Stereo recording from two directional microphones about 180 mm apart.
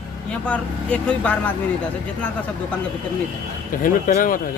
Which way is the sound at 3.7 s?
50° left (ahead or behind).